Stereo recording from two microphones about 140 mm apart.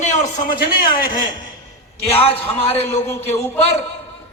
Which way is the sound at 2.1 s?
45° left (ahead or behind).